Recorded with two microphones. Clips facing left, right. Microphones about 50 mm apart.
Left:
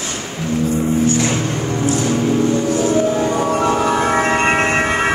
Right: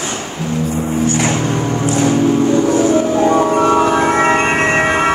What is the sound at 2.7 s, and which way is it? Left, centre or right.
Music, right.